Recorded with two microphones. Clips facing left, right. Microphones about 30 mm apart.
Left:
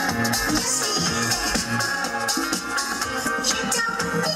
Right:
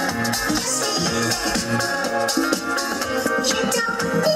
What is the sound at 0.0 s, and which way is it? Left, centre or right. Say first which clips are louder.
Music: right 1 dB; centre.